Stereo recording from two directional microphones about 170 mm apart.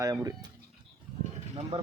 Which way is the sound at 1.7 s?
35° right (ahead or behind).